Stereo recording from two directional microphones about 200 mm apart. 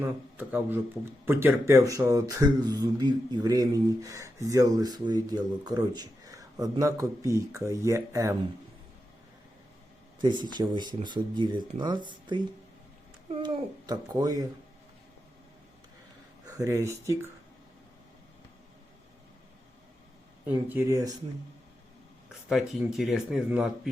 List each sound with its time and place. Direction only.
0.0 s speech: 10° right (ahead or behind)
10.2 s speech: 20° right (ahead or behind)
16.5 s speech: 15° right (ahead or behind)
20.5 s speech: 10° right (ahead or behind)
22.3 s speech: centre (ahead or behind)